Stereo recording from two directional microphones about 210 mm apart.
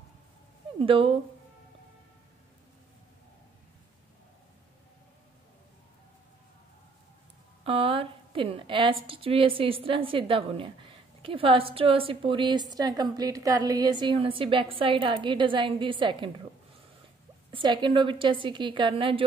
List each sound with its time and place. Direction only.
0.7 s a woman's voice: 25° right (ahead or behind)
7.6 s a woman's voice: 25° right (ahead or behind)
17.5 s a woman's voice: 25° right (ahead or behind)